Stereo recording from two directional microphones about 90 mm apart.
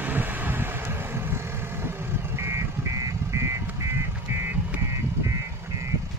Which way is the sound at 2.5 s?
35° right (ahead or behind).